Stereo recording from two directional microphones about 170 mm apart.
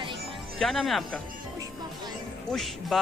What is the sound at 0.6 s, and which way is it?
Speech, centre (ahead or behind).